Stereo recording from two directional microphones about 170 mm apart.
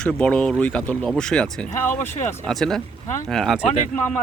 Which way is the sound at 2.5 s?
Centre (ahead or behind).